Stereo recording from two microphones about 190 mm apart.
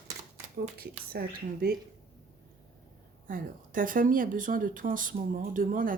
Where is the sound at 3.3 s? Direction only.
45° right (ahead or behind).